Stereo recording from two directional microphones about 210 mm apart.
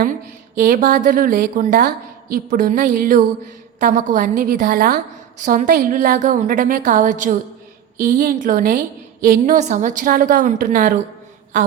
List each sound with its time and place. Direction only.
0.0 s a woman's voice: 40° right (ahead or behind)